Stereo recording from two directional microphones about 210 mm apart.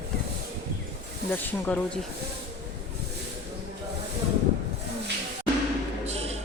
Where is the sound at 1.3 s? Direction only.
5° left (ahead or behind).